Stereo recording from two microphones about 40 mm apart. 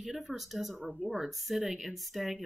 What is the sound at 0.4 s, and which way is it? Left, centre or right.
Speech, centre.